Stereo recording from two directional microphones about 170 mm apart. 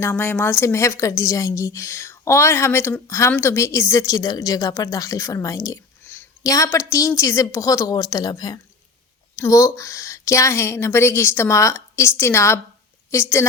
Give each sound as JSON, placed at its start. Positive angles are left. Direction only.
{"t": 0.0, "sound": "a woman's voice", "side_deg": 10}